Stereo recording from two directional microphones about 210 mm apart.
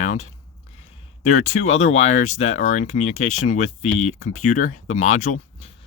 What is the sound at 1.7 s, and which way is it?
Speech, 35° left (ahead or behind).